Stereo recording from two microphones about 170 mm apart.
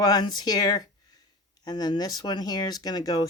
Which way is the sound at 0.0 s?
25° left (ahead or behind).